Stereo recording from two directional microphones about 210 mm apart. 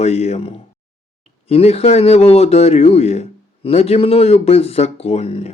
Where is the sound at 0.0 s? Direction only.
30° left (ahead or behind).